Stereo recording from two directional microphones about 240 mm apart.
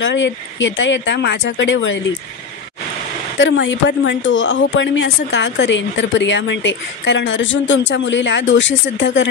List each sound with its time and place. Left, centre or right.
0.0 s speech: left
3.3 s speech: left